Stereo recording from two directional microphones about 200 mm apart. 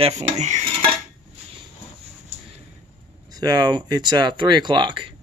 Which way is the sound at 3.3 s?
20° right (ahead or behind).